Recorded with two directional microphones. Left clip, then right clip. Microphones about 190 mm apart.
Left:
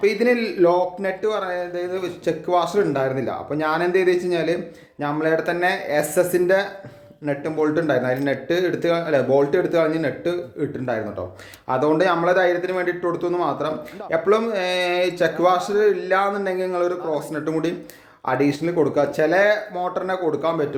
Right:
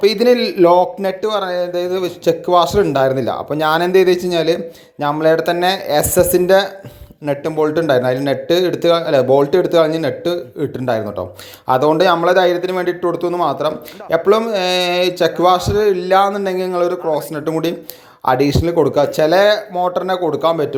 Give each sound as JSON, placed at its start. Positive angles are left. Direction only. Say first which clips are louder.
{"t": 0.0, "sound": "a man's voice", "louder": "right 6 dB", "side_deg": -30}